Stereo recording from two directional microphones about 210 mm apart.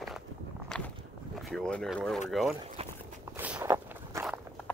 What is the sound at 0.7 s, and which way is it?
Walk, 5° left (ahead or behind).